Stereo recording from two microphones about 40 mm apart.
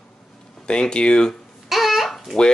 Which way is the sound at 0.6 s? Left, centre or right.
Left.